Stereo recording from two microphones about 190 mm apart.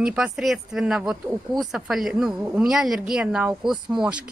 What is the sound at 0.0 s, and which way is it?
A woman's voice, 5° right (ahead or behind).